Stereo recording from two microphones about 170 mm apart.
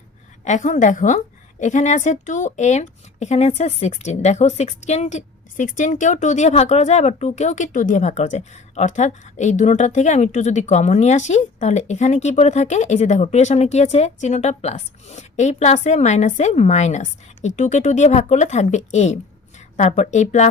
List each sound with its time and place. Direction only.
0.4 s a woman's voice: 45° left (ahead or behind)